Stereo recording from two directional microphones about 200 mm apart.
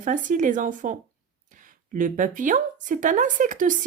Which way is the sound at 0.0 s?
40° right (ahead or behind).